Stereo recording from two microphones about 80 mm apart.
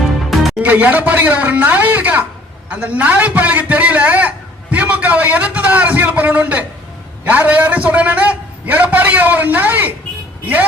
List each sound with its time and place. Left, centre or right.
0.3 s music: centre
0.6 s a man's voice: right